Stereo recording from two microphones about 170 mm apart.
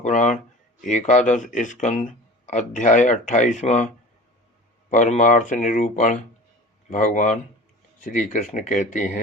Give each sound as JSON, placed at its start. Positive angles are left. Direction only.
{"t": 0.0, "sound": "speech", "side_deg": 45}
{"t": 4.9, "sound": "speech", "side_deg": 45}